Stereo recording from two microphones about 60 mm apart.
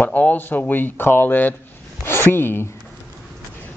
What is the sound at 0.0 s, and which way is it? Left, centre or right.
Speech, left.